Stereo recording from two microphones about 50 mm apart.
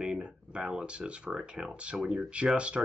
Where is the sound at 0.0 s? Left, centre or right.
Centre.